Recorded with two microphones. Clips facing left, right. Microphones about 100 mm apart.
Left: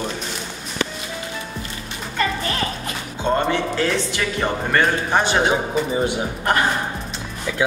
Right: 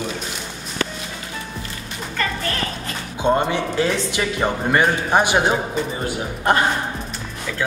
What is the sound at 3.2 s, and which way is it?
Speech, 15° right (ahead or behind).